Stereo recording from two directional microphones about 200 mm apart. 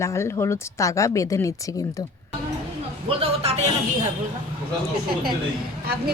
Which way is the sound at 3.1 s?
30° right (ahead or behind).